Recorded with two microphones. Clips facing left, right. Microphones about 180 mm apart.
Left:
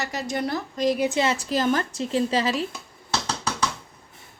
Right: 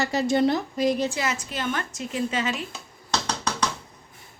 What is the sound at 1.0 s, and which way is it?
A woman's voice, 25° left (ahead or behind).